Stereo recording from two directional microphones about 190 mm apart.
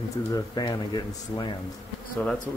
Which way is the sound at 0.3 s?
20° left (ahead or behind).